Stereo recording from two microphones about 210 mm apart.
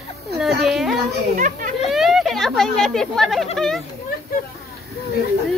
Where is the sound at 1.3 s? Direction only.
35° right (ahead or behind).